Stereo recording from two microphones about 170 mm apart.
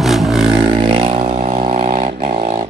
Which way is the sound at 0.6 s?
30° right (ahead or behind).